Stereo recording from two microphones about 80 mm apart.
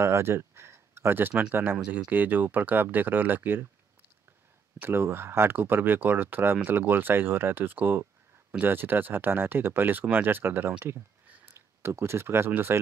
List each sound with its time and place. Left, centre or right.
0.0 s speech: right
4.7 s speech: right